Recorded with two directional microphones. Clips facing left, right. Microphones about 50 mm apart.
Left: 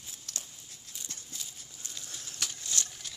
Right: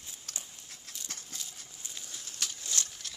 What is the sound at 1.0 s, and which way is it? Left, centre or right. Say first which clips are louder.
Horse: right 2 dB; right.